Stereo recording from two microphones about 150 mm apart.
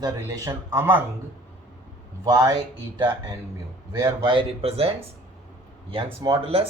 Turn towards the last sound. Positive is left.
turn(degrees=-35)  # may be behind; listen again after turning